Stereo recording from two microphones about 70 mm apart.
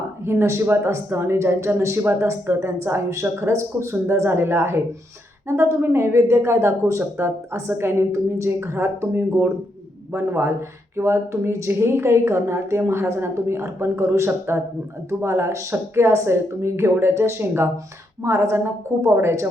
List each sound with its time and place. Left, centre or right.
0.3 s a woman's voice: right